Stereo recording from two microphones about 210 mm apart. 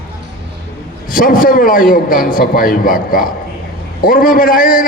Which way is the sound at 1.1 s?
40° left (ahead or behind).